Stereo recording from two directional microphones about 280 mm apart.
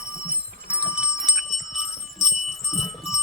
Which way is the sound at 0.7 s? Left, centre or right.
Centre.